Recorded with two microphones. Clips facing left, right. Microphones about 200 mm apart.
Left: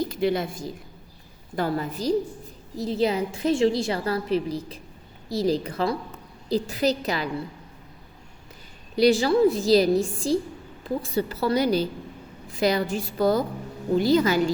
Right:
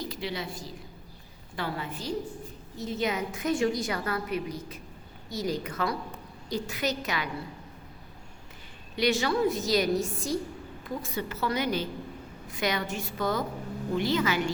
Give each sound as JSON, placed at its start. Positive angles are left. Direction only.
{"t": 0.1, "sound": "a woman's voice", "side_deg": 50}
{"t": 9.0, "sound": "a woman's voice", "side_deg": 35}